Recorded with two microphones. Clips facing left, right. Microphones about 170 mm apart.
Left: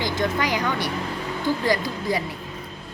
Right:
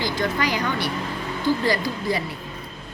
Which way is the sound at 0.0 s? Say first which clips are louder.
Even; 20° left (ahead or behind).